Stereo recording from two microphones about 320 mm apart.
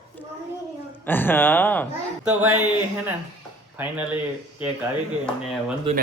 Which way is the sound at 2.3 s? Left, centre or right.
Centre.